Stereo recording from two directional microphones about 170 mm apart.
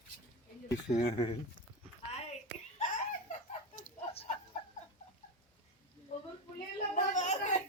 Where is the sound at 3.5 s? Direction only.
40° left (ahead or behind).